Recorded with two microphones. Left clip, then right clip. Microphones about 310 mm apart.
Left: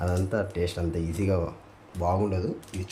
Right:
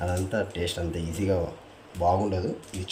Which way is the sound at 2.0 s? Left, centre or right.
Left.